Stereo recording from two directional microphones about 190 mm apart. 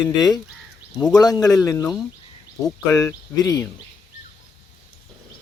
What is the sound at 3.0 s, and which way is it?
Speech, 20° left (ahead or behind).